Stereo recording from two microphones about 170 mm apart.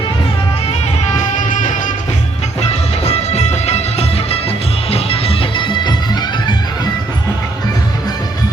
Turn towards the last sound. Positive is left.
turn(degrees=25)  # may be behind; listen again after turning